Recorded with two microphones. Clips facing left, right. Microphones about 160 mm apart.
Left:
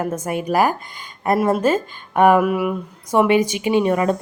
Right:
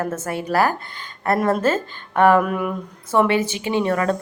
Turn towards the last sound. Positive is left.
turn(degrees=15)  # may be behind; listen again after turning